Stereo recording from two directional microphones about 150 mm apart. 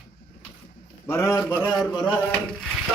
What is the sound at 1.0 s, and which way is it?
Speech, 20° left (ahead or behind).